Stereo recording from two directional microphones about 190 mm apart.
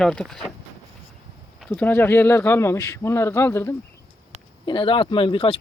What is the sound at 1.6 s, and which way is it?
Speech, 5° left (ahead or behind).